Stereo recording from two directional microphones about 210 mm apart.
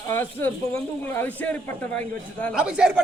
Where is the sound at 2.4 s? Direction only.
5° right (ahead or behind).